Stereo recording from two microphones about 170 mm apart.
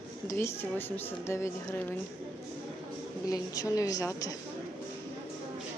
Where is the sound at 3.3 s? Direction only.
20° left (ahead or behind).